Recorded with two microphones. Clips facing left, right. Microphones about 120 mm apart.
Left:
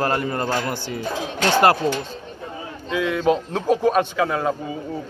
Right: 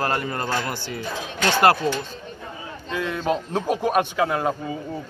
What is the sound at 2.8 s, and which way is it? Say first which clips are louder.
Speech: left 5 dB; centre (ahead or behind).